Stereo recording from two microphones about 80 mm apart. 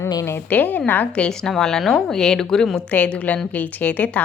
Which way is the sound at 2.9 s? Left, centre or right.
Centre.